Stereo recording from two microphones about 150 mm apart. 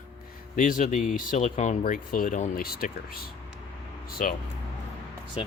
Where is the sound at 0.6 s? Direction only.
60° left (ahead or behind).